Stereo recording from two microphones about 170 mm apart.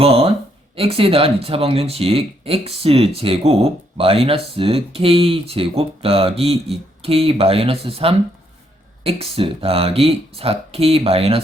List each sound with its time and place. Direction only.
0.0 s speech: 35° right (ahead or behind)